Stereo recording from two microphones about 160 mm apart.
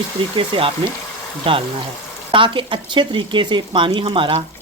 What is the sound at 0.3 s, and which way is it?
Speech, 35° right (ahead or behind).